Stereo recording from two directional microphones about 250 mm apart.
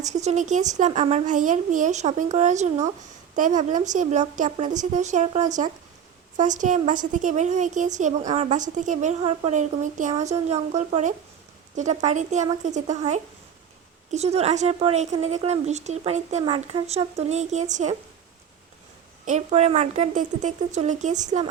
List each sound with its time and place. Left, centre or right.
0.0 s a woman's voice: right
19.2 s a woman's voice: right